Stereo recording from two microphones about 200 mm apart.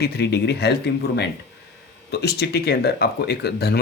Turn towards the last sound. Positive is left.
turn(degrees=55)  # may be behind; listen again after turning